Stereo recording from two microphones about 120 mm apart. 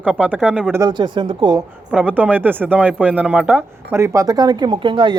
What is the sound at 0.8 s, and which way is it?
Speech, 40° right (ahead or behind).